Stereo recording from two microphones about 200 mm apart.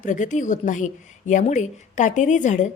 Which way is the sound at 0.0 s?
40° left (ahead or behind).